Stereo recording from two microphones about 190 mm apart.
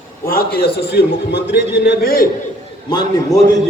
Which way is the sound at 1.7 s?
55° left (ahead or behind).